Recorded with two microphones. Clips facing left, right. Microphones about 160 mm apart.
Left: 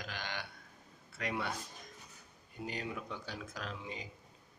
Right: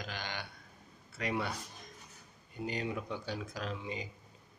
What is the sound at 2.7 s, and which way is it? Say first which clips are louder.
Speech: right 4 dB; centre (ahead or behind).